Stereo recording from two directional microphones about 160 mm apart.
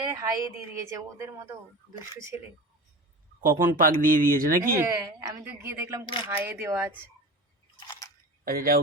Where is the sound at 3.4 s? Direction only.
60° right (ahead or behind).